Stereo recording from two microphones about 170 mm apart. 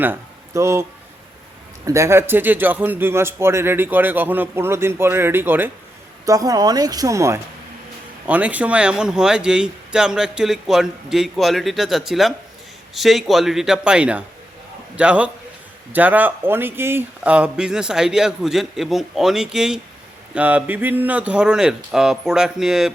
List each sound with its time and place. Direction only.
0.0 s a man's voice: 15° right (ahead or behind)